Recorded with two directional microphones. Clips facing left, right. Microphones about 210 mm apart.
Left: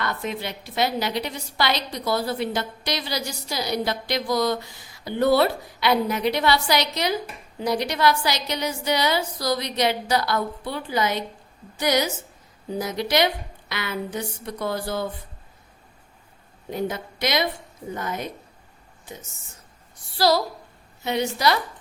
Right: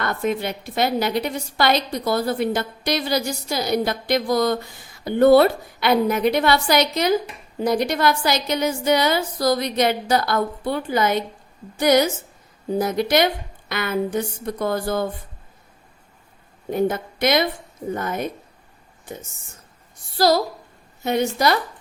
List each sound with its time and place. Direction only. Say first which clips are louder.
0.0 s a woman's voice: right 5 dB; 50° right (ahead or behind)
16.6 s a woman's voice: right 6 dB; 50° right (ahead or behind)
20.1 s a woman's voice: right 3 dB; 45° right (ahead or behind)